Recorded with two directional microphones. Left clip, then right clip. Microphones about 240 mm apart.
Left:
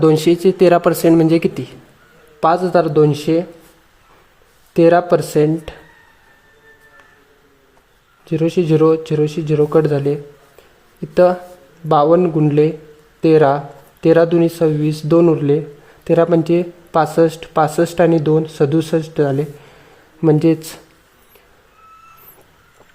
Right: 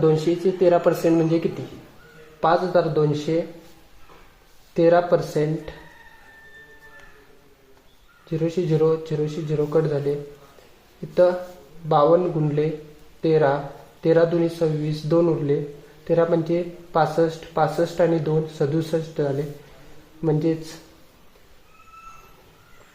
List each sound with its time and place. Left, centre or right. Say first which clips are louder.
0.0 s speech: left 7 dB; left
4.7 s speech: left 6 dB; left
8.3 s speech: left 8 dB; left
11.1 s speech: left 6 dB; left